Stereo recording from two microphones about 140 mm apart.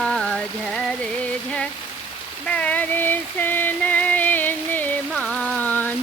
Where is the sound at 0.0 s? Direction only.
5° left (ahead or behind).